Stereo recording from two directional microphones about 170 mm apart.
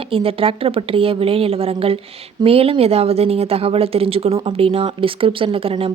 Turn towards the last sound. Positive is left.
turn(degrees=-30)  # may be behind; listen again after turning